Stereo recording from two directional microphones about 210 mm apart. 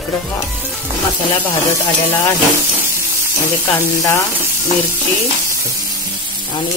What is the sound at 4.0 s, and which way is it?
Sizzle, 15° left (ahead or behind).